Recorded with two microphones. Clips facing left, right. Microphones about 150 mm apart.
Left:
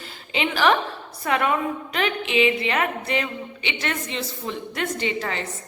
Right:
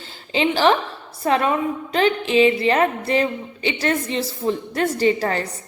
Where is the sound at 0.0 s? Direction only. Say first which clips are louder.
Right 5 dB; 30° right (ahead or behind).